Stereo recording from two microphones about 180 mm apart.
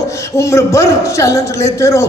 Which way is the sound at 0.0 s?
15° left (ahead or behind).